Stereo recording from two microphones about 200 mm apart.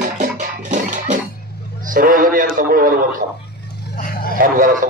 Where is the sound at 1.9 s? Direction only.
45° right (ahead or behind).